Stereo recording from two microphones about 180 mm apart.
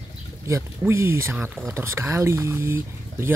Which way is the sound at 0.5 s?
15° right (ahead or behind).